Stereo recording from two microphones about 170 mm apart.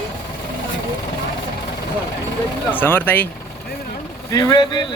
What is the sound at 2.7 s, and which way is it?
Speech, 10° left (ahead or behind).